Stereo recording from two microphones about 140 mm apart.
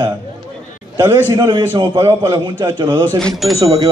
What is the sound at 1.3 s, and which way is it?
Speech, 30° right (ahead or behind).